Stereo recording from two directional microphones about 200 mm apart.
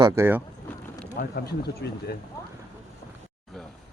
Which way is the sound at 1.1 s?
50° left (ahead or behind).